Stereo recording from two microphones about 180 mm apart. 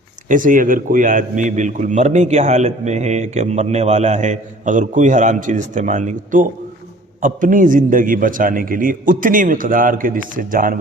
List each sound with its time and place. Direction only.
0.3 s a man's voice: 50° right (ahead or behind)